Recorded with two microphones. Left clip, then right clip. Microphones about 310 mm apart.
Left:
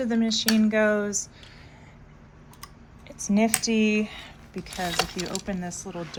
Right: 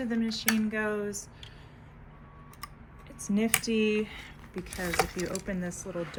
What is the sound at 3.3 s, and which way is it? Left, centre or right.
Speech, left.